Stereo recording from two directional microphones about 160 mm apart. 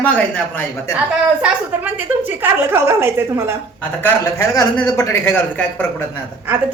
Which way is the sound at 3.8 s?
10° left (ahead or behind).